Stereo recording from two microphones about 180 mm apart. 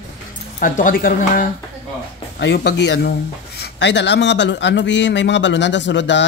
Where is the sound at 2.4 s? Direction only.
70° left (ahead or behind).